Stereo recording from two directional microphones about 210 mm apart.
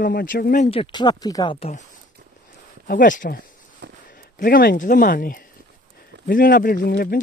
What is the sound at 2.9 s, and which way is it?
Speech, 40° left (ahead or behind).